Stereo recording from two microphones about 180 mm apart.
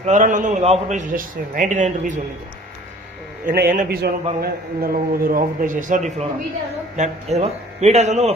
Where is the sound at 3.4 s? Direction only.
55° right (ahead or behind).